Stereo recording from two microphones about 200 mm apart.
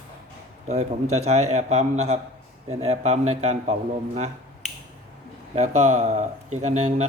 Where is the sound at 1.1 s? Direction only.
35° right (ahead or behind).